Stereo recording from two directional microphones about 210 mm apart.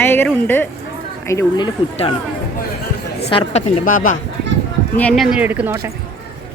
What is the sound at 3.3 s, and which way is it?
Speech, 30° left (ahead or behind).